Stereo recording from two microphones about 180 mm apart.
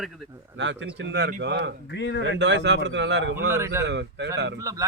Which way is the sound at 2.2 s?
80° right.